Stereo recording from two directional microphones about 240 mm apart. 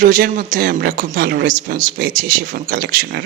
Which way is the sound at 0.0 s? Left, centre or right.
Right.